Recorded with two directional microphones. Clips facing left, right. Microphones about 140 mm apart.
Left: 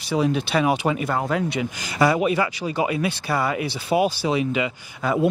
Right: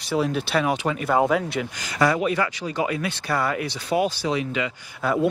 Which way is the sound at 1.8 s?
10° left (ahead or behind).